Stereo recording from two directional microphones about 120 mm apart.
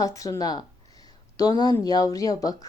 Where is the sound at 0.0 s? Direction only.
30° left (ahead or behind).